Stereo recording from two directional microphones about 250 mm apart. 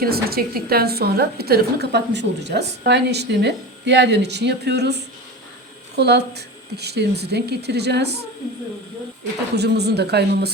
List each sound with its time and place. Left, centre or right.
0.0 s a woman's voice: right
9.6 s a woman's voice: right